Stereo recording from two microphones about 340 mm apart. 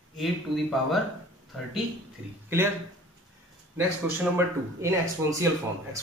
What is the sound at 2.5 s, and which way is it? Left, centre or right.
Speech, centre.